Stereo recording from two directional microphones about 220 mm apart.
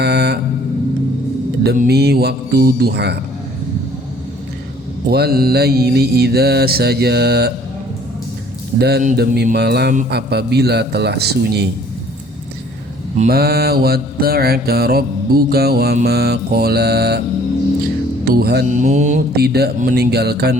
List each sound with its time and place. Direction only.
0.0 s a sound: 50° right (ahead or behind)
1.6 s mantra: 40° right (ahead or behind)
5.1 s mantra: 45° right (ahead or behind)
8.8 s mantra: 40° right (ahead or behind)
13.1 s mantra: 45° right (ahead or behind)
18.3 s mantra: 45° right (ahead or behind)